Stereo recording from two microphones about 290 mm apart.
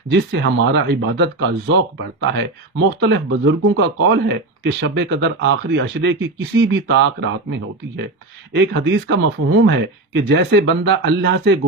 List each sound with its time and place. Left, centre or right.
0.1 s speech: right
3.0 s speech: right